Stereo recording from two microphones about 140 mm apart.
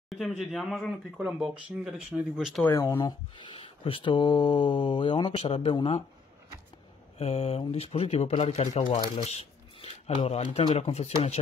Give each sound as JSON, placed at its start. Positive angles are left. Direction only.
{"t": 0.1, "sound": "speech", "side_deg": 0}
{"t": 2.6, "sound": "speech", "side_deg": 20}
{"t": 7.2, "sound": "speech", "side_deg": 45}